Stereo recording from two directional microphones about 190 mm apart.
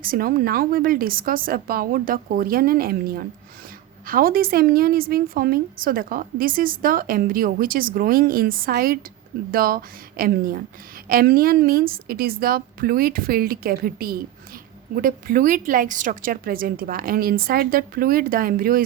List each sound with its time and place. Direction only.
0.0 s a woman's voice: 50° right (ahead or behind)